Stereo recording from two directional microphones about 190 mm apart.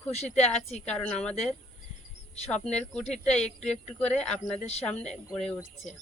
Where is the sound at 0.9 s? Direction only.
5° left (ahead or behind).